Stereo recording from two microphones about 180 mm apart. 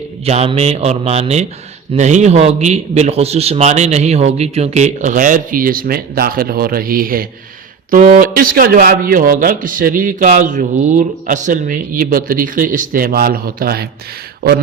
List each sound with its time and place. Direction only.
0.3 s a man's voice: 35° right (ahead or behind); by 13.8 s 55° right (ahead or behind)